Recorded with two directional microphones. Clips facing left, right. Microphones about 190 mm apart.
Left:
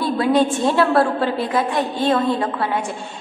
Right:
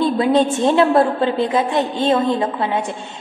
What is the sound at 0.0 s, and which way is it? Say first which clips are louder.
A woman's voice: right 2 dB; 20° right (ahead or behind).